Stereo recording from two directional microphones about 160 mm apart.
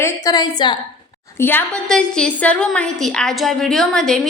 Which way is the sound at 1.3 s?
15° left (ahead or behind).